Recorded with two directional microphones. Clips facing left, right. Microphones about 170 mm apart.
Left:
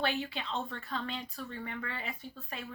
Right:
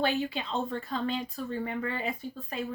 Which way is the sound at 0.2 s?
40° right (ahead or behind).